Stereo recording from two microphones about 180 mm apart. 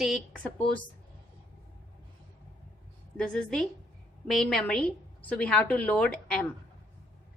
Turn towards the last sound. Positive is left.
turn(degrees=5)  # may be behind; listen again after turning